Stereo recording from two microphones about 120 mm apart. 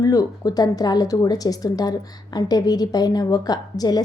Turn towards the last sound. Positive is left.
turn(degrees=35)  # may be behind; listen again after turning